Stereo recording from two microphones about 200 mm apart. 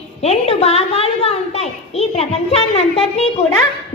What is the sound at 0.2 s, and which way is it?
A woman's voice, 30° left (ahead or behind).